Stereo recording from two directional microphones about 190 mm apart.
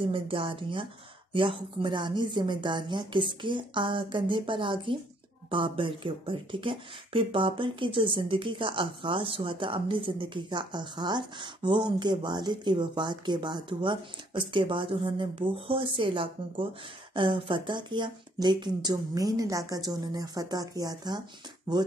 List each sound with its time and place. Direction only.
0.1 s speech: 25° right (ahead or behind)